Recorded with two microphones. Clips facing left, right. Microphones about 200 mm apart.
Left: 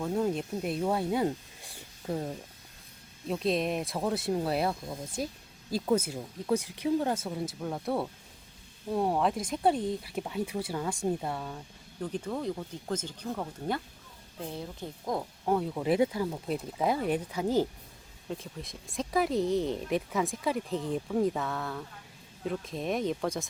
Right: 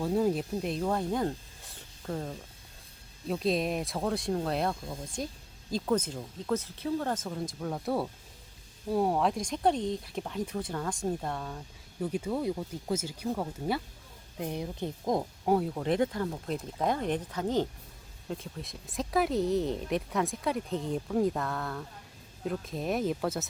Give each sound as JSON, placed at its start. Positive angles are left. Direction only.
{"t": 0.0, "sound": "speech", "side_deg": -5}
{"t": 3.2, "sound": "speech", "side_deg": 0}
{"t": 11.9, "sound": "speech", "side_deg": -10}
{"t": 15.6, "sound": "speech", "side_deg": 0}